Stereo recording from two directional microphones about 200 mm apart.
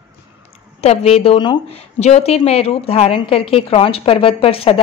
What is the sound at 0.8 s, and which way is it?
A woman's voice, 30° left (ahead or behind).